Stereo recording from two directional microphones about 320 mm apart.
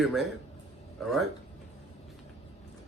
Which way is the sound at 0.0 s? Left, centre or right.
Centre.